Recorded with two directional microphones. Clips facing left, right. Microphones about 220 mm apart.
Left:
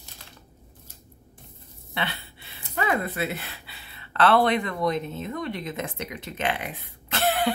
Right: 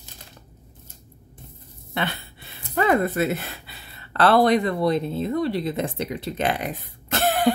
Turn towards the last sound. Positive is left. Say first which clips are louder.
# right 2 dB
turn(degrees=-45)  # may be behind; listen again after turning